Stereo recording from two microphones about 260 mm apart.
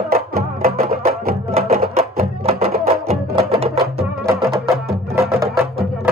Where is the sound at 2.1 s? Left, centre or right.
Right.